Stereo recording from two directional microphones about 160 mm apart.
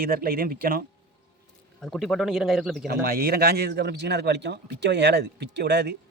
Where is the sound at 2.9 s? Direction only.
70° right (ahead or behind).